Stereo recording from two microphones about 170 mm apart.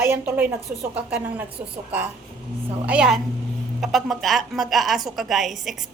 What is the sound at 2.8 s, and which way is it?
A woman's voice, 5° right (ahead or behind).